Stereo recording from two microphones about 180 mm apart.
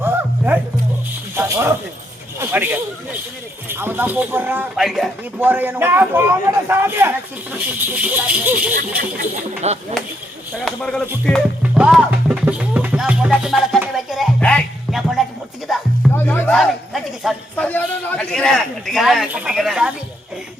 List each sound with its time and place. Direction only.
0.0 s music: 10° right (ahead or behind)
1.4 s snake: 15° right (ahead or behind)
2.4 s speech: 10° right (ahead or behind)
9.6 s speech: 35° right (ahead or behind)
10.7 s a man's voice: centre (ahead or behind)
11.6 s music: 5° right (ahead or behind)
16.1 s music: 10° left (ahead or behind)
16.6 s a man's voice: centre (ahead or behind)